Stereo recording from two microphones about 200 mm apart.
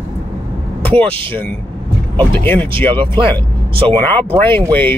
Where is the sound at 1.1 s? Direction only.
25° right (ahead or behind).